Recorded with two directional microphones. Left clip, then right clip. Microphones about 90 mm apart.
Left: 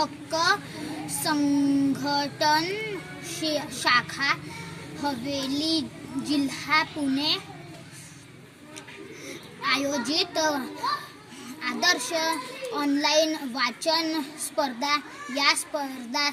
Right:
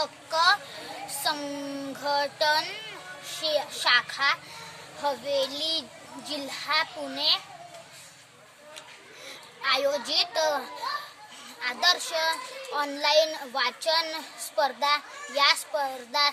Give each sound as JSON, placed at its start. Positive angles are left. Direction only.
{"t": 0.0, "sound": "a child's voice", "side_deg": -30}
{"t": 9.6, "sound": "a child's voice", "side_deg": -35}
{"t": 11.6, "sound": "a child's voice", "side_deg": -35}